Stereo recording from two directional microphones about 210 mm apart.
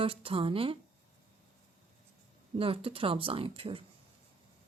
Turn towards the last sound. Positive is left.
turn(degrees=-25)  # may be behind; listen again after turning